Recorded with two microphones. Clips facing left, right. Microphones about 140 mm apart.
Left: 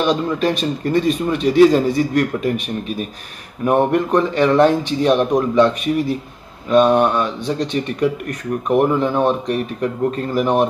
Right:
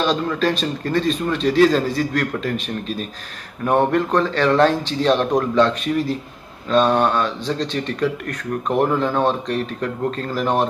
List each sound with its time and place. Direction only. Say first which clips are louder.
0.0 s speech: left 2 dB; 15° left (ahead or behind)